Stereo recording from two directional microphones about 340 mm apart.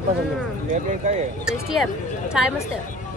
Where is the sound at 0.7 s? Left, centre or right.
Right.